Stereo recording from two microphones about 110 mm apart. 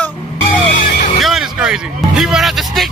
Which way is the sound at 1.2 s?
5° right (ahead or behind).